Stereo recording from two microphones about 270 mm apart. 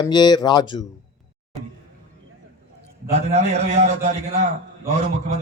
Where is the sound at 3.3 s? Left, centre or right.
Right.